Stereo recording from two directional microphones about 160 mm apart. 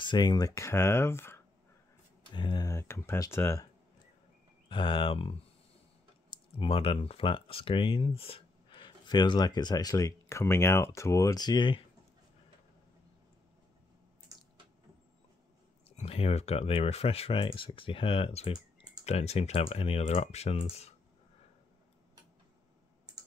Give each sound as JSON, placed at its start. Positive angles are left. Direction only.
{"t": 0.0, "sound": "speech", "side_deg": 25}
{"t": 2.3, "sound": "speech", "side_deg": 30}
{"t": 4.6, "sound": "speech", "side_deg": 30}
{"t": 15.9, "sound": "speech", "side_deg": 40}